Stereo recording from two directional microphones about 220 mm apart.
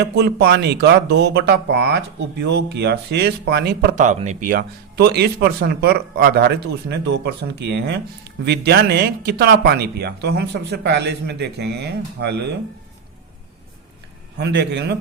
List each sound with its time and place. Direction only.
0.0 s speech: 50° right (ahead or behind)
14.3 s speech: 50° right (ahead or behind)